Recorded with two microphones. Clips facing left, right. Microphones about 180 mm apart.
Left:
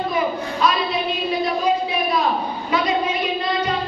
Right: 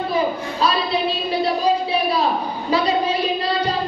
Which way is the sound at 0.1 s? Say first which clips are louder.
Right 1 dB; 30° right (ahead or behind).